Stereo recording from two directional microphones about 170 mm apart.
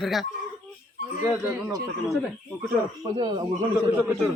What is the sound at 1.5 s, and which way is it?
Speech, 5° right (ahead or behind).